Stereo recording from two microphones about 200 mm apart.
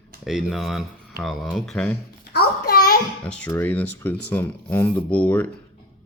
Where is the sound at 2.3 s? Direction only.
50° left (ahead or behind).